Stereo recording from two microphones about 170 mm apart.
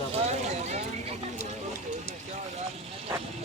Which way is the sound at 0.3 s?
40° right (ahead or behind).